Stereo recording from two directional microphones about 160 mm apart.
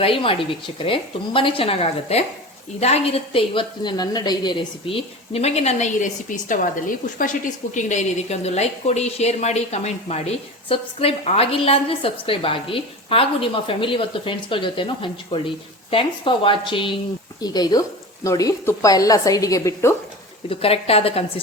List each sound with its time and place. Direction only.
0.0 s a woman's voice: 35° left (ahead or behind)
20.5 s a woman's voice: 35° left (ahead or behind)